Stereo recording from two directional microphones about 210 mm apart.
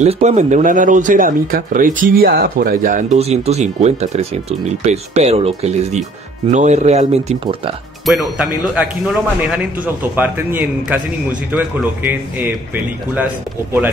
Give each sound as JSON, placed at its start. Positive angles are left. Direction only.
{"t": 0.0, "sound": "speech", "side_deg": -30}
{"t": 8.0, "sound": "speech", "side_deg": -5}